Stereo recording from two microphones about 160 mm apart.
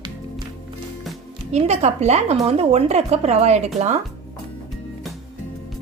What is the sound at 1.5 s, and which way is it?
A woman's voice, 45° right (ahead or behind).